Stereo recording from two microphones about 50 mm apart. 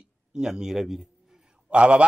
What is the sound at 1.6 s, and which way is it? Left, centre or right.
Speech, right.